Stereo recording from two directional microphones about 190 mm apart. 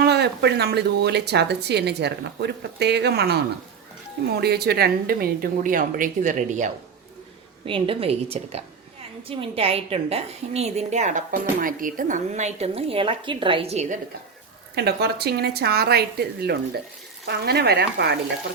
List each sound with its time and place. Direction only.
0.0 s a woman's voice: 60° right (ahead or behind); by 6.7 s 40° right (ahead or behind)
7.6 s a woman's voice: 30° right (ahead or behind)
14.8 s speech: 60° right (ahead or behind)